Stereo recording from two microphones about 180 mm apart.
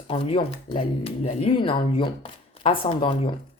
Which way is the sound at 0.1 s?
30° left (ahead or behind).